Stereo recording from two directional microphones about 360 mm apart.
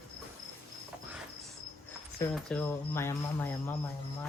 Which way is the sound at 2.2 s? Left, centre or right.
Centre.